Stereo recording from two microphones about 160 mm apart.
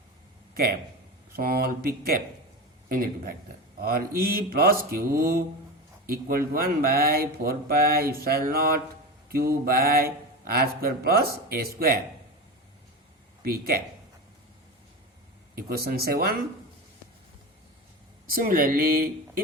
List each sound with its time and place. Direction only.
1.4 s speech: 70° right (ahead or behind)
6.1 s speech: 70° right (ahead or behind)
13.4 s speech: 70° right (ahead or behind)
15.5 s speech: 70° right (ahead or behind)
18.3 s speech: 65° right (ahead or behind)